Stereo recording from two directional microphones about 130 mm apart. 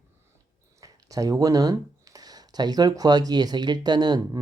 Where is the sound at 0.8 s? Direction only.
25° right (ahead or behind).